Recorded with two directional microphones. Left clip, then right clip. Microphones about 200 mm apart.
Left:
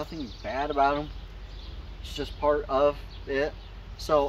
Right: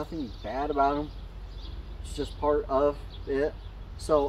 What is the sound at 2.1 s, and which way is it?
Speech, 5° left (ahead or behind).